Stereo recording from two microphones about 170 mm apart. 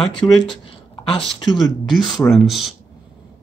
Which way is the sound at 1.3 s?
Centre (ahead or behind).